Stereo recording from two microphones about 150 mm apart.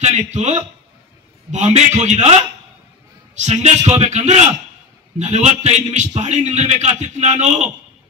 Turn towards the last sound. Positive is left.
turn(degrees=-50)  # may be behind; listen again after turning